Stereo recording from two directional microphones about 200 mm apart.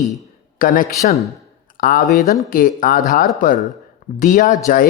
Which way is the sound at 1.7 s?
45° left (ahead or behind).